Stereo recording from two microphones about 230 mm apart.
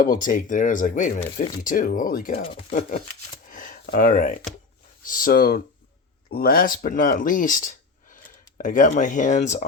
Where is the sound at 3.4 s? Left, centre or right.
Left.